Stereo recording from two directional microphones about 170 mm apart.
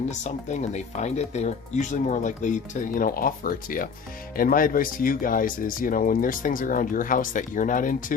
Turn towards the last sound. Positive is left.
turn(degrees=50)  # may be behind; listen again after turning